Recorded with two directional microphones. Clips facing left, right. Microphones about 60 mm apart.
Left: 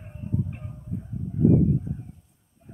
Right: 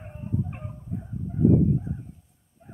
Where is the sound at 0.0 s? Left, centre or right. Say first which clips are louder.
Even; right.